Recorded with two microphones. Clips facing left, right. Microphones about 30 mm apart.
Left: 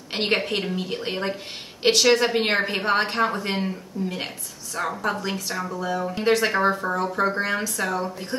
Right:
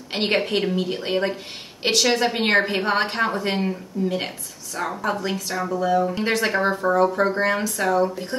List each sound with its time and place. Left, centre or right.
0.1 s speech: centre